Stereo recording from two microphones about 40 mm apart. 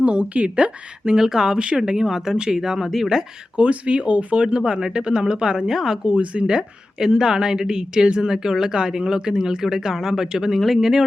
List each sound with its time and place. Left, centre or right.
0.0 s speech: right
1.1 s speech: centre
3.6 s speech: right
4.4 s speech: right
8.3 s speech: centre